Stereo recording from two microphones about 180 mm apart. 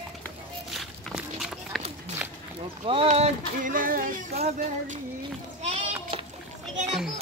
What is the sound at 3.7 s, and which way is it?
Speech, 50° right (ahead or behind).